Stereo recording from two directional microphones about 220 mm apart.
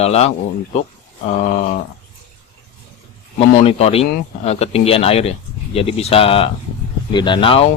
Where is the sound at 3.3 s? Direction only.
30° left (ahead or behind).